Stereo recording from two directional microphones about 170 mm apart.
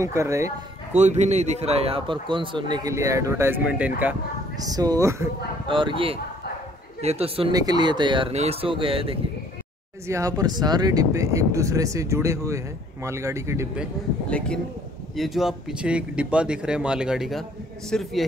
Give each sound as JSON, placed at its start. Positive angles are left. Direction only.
{"t": 0.0, "sound": "speech", "side_deg": -15}
{"t": 0.9, "sound": "speech", "side_deg": -40}
{"t": 4.6, "sound": "speech", "side_deg": -20}
{"t": 5.7, "sound": "speech", "side_deg": -30}
{"t": 7.5, "sound": "speech", "side_deg": -25}
{"t": 10.0, "sound": "speech", "side_deg": -20}
{"t": 14.3, "sound": "speech", "side_deg": 5}